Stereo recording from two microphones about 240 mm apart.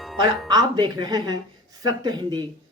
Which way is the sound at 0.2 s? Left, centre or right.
Centre.